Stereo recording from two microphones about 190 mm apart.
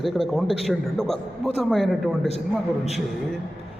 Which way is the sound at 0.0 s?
Centre (ahead or behind).